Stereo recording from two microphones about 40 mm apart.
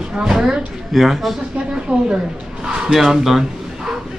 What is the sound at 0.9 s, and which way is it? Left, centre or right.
Speech, centre.